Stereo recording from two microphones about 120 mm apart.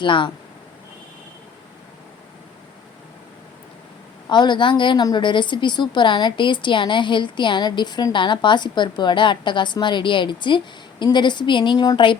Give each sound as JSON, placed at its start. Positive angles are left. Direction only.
{"t": 0.0, "sound": "speech", "side_deg": 45}
{"t": 4.3, "sound": "a woman's voice", "side_deg": 40}